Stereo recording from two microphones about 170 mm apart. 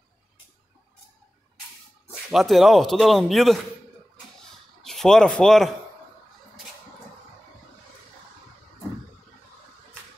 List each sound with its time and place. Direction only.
2.3 s speech: centre (ahead or behind)
4.8 s speech: 5° left (ahead or behind)